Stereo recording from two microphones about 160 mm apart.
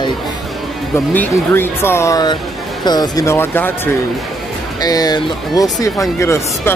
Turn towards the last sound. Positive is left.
turn(degrees=20)  # may be behind; listen again after turning